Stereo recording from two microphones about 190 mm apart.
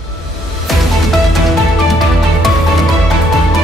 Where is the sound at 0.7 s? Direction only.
Centre (ahead or behind).